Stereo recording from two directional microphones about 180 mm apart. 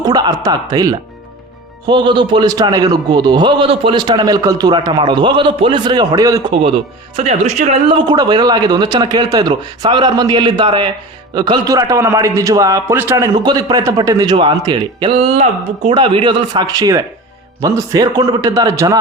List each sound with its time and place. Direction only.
0.0 s a man's voice: 20° right (ahead or behind)